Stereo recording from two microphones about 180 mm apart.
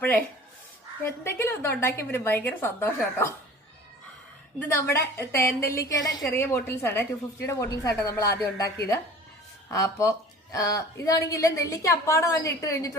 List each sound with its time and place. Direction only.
0.0 s a woman's voice: 10° left (ahead or behind)
4.7 s a woman's voice: 10° left (ahead or behind)